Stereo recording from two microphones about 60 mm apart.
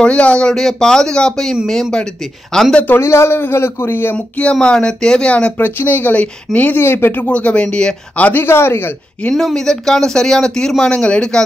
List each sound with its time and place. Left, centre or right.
0.0 s speech: centre
0.5 s speech: centre
2.9 s speech: left
4.4 s speech: centre
5.6 s speech: left
7.2 s speech: left
8.3 s speech: left
9.3 s speech: centre